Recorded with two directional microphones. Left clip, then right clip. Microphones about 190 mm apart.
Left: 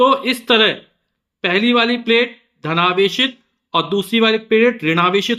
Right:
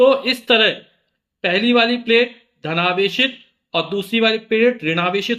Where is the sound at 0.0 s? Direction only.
30° left (ahead or behind).